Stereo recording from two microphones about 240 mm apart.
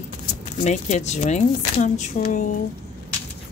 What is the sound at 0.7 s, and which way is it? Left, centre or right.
Speech, left.